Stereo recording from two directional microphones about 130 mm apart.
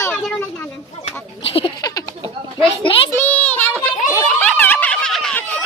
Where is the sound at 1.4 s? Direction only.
45° left (ahead or behind).